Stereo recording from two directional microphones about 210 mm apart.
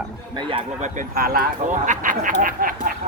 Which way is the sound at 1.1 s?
45° right (ahead or behind).